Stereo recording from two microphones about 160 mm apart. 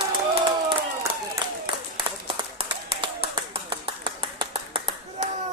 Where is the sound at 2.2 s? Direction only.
35° right (ahead or behind).